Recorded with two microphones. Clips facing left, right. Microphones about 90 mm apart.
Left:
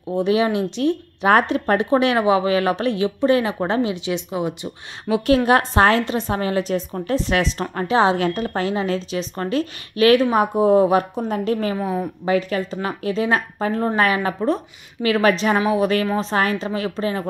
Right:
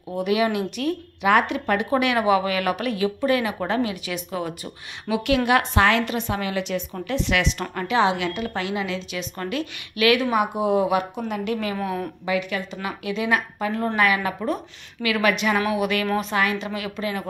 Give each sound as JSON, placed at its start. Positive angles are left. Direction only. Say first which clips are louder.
{"t": 0.1, "sound": "speech", "louder": "left 3 dB", "side_deg": 30}
{"t": 5.1, "sound": "a woman's voice", "louder": "left 4 dB", "side_deg": 35}